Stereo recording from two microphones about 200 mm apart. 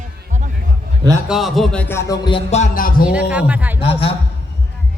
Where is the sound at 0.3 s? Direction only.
40° right (ahead or behind).